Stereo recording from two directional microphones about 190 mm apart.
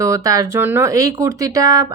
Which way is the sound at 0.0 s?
15° right (ahead or behind).